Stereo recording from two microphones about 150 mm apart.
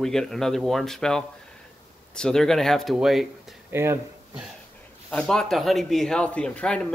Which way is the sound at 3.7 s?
15° right (ahead or behind).